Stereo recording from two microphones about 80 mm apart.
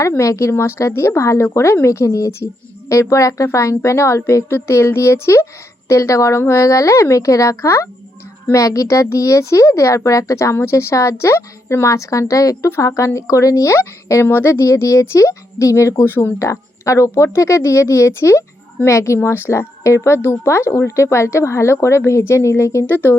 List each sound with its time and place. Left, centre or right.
0.2 s speech: left